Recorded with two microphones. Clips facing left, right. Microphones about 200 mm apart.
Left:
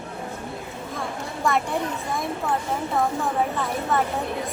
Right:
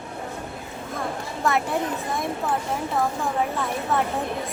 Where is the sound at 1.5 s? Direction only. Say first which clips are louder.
Even; centre (ahead or behind).